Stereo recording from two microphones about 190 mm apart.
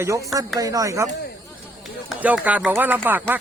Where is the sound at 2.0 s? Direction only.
5° right (ahead or behind).